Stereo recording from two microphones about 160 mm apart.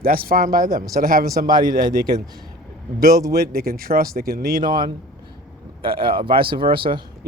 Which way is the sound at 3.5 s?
70° right (ahead or behind).